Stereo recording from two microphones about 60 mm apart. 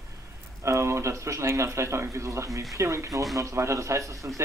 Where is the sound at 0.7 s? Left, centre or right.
Right.